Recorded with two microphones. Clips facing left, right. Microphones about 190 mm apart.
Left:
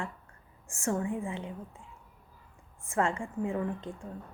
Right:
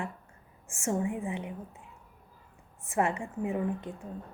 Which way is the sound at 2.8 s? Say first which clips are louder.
Right 1 dB; 20° right (ahead or behind).